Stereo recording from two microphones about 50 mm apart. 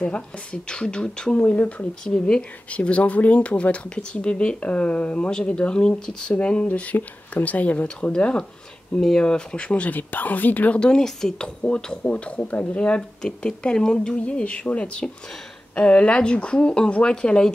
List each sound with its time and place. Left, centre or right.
0.0 s speech: centre
9.8 s speech: left
10.8 s speech: centre